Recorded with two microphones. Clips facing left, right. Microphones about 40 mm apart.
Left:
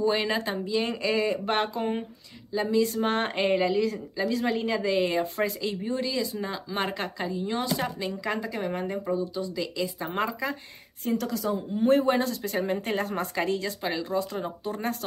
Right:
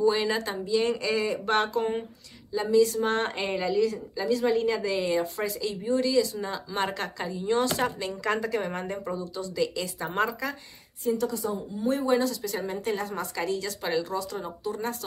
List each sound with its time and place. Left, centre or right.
0.2 s a woman's voice: left
2.8 s a woman's voice: left; by 10.0 s centre
10.0 s a woman's voice: centre
11.1 s a woman's voice: left
13.7 s a woman's voice: centre
14.0 s speech: left